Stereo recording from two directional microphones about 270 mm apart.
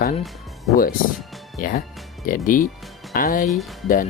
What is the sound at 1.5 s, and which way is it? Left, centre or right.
Speech, left.